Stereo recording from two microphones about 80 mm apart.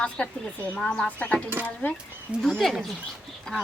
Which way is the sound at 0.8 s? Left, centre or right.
Centre.